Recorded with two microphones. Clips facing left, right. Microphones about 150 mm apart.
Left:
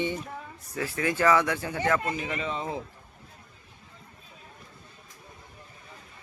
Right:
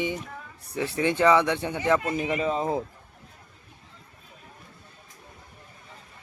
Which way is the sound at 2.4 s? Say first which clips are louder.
Right 6 dB; 40° right (ahead or behind).